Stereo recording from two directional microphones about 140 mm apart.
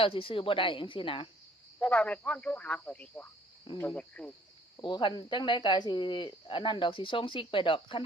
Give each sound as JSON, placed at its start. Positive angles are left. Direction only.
{"t": 0.0, "sound": "speech", "side_deg": 40}
{"t": 1.8, "sound": "speech", "side_deg": 10}
{"t": 4.8, "sound": "speech", "side_deg": 35}